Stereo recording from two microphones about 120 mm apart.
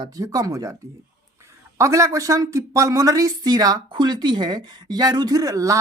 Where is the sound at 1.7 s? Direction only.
25° right (ahead or behind).